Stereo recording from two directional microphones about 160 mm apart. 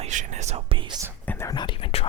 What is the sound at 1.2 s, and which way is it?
Whispering, 10° left (ahead or behind).